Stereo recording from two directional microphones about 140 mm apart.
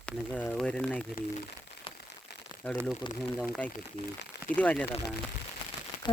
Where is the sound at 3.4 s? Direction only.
Centre (ahead or behind).